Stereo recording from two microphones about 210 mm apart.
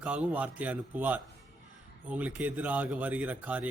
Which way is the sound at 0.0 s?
5° right (ahead or behind).